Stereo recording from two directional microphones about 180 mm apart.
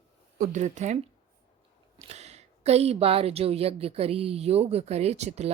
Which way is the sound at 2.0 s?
35° right (ahead or behind).